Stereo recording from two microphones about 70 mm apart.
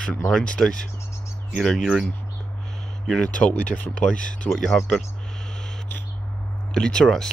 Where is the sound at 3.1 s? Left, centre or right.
Centre.